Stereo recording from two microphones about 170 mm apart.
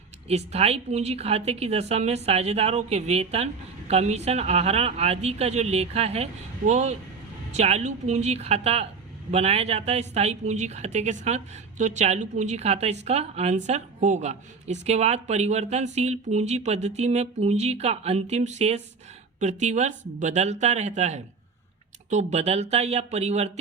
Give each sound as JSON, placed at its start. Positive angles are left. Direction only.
{"t": 0.3, "sound": "a woman's voice", "side_deg": -40}